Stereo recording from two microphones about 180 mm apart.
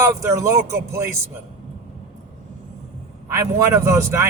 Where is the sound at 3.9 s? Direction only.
15° right (ahead or behind).